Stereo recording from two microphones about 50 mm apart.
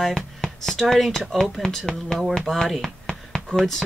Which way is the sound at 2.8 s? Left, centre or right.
Centre.